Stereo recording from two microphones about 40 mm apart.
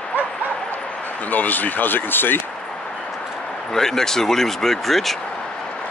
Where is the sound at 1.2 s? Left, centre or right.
Left.